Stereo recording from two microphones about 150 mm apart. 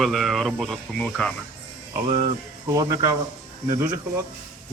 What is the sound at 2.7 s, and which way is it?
Speech, 25° right (ahead or behind).